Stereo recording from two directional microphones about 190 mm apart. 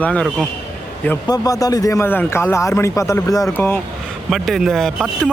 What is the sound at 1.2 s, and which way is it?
Speech, 20° left (ahead or behind).